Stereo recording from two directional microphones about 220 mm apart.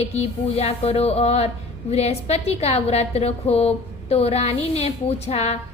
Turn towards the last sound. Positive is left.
turn(degrees=30)  # may be behind; listen again after turning